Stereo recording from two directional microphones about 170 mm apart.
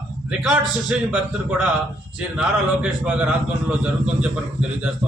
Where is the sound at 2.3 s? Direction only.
5° right (ahead or behind).